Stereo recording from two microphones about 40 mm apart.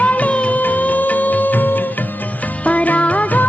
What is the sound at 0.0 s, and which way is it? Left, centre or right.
Music, left.